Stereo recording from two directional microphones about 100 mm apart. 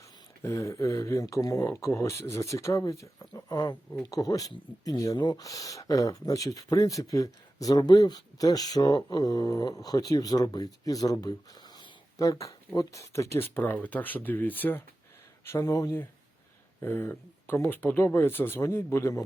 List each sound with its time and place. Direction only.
0.4 s speech: 30° left (ahead or behind)
15.4 s speech: 30° left (ahead or behind)
16.8 s speech: 20° left (ahead or behind)